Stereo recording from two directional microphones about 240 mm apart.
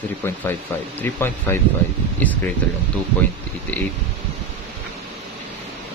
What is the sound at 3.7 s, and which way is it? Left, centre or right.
Speech, centre.